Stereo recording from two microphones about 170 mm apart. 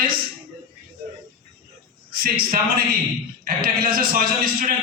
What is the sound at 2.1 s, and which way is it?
A man's voice, 60° right (ahead or behind).